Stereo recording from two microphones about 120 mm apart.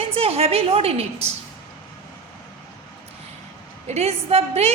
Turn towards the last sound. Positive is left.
turn(degrees=-60)  # may be behind; listen again after turning